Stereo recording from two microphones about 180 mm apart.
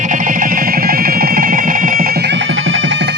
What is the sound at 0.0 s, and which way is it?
Music, 45° right (ahead or behind).